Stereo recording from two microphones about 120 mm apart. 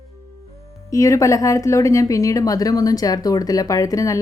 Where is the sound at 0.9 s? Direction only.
25° left (ahead or behind).